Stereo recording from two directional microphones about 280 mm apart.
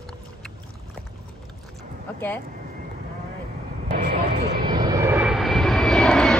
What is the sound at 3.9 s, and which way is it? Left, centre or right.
Vehicle, right.